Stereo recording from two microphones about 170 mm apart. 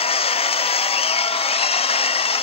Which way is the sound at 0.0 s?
35° left (ahead or behind).